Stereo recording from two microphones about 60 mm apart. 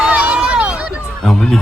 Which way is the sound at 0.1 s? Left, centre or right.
Right.